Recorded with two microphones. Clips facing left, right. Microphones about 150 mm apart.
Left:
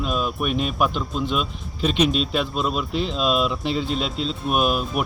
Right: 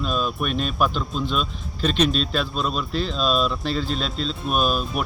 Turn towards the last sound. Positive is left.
turn(degrees=15)  # may be behind; listen again after turning